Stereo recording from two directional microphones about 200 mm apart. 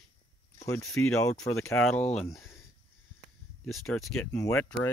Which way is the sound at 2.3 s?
Centre (ahead or behind).